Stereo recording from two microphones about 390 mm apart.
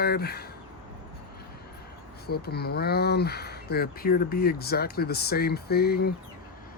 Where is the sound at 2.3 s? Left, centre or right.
Left.